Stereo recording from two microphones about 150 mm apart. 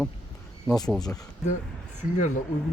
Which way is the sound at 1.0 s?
25° left (ahead or behind).